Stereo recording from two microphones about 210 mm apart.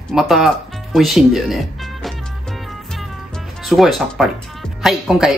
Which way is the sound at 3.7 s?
Centre (ahead or behind).